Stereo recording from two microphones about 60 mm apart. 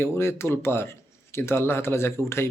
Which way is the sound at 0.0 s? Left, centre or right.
Left.